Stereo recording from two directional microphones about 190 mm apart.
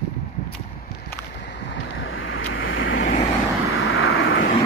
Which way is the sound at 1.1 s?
65° left (ahead or behind).